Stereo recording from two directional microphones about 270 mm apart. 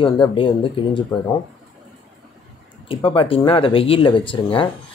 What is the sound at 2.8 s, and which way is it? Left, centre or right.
Speech, centre.